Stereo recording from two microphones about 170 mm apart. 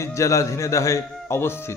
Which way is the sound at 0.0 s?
15° left (ahead or behind).